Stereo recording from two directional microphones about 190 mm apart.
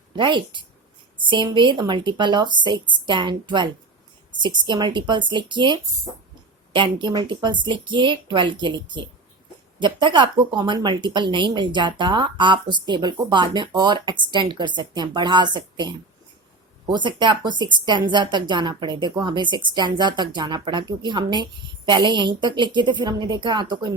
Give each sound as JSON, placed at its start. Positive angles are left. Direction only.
{"t": 0.2, "sound": "a woman's voice", "side_deg": -25}